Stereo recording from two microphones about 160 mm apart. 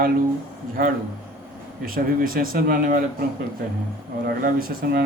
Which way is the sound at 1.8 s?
60° right (ahead or behind).